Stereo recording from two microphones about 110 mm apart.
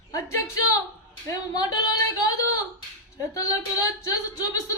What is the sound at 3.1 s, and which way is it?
Speech, 30° left (ahead or behind).